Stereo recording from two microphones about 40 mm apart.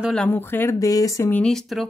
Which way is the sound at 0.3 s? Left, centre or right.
Left.